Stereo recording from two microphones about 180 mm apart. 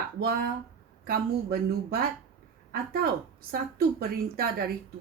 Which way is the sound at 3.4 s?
55° right (ahead or behind).